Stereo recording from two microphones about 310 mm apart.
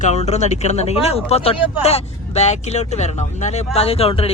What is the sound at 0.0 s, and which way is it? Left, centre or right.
A man's voice, left.